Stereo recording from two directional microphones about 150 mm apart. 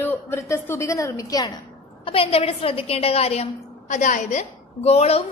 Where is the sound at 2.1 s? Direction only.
40° left (ahead or behind).